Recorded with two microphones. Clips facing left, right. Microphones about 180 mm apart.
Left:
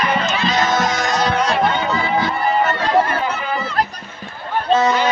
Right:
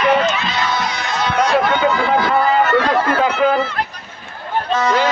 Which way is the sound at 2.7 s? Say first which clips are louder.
Right 2 dB; 80° right.